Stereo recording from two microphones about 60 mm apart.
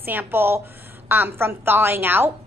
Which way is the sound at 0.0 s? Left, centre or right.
Right.